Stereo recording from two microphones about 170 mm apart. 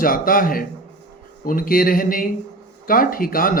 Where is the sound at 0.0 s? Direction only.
55° left (ahead or behind).